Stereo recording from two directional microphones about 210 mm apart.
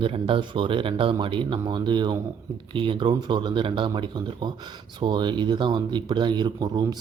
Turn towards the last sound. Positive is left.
turn(degrees=-20)  # may be behind; listen again after turning